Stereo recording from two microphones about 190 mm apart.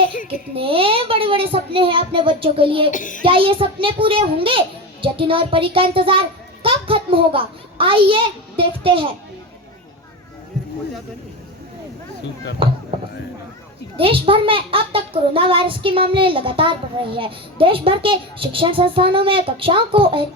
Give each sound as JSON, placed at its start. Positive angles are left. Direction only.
{"t": 0.1, "sound": "a child's voice", "side_deg": 45}
{"t": 0.5, "sound": "a child's voice", "side_deg": -30}
{"t": 2.9, "sound": "a child's voice", "side_deg": 45}
{"t": 3.2, "sound": "a child's voice", "side_deg": -30}
{"t": 12.6, "sound": "a child's voice", "side_deg": -30}
{"t": 13.9, "sound": "a child's voice", "side_deg": -30}